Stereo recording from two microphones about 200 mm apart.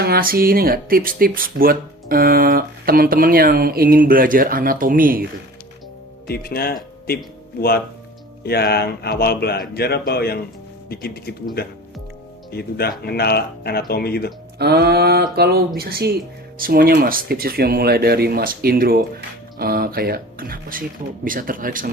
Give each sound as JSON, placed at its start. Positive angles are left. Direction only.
{"t": 0.0, "sound": "speech", "side_deg": -50}
{"t": 6.2, "sound": "speech", "side_deg": 50}
{"t": 8.4, "sound": "speech", "side_deg": 55}
{"t": 14.6, "sound": "speech", "side_deg": -55}